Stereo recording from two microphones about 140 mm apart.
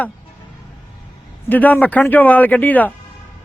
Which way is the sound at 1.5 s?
10° left (ahead or behind).